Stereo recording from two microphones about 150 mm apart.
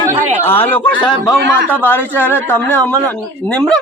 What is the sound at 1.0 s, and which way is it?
Speech, 30° left (ahead or behind).